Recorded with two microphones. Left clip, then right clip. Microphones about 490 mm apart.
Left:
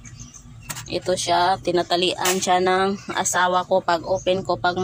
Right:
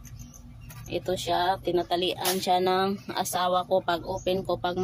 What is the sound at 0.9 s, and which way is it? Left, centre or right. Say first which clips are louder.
Speech: left 6 dB; right.